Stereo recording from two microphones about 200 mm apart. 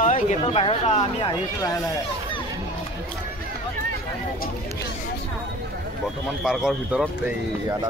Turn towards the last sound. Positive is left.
turn(degrees=-5)  # may be behind; listen again after turning